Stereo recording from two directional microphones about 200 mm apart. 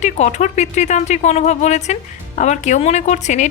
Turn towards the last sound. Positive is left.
turn(degrees=35)  # may be behind; listen again after turning